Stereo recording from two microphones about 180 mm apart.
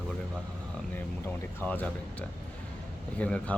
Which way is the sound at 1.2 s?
10° left (ahead or behind).